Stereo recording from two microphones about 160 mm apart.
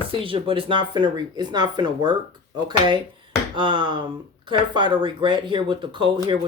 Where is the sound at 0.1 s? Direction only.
35° right (ahead or behind).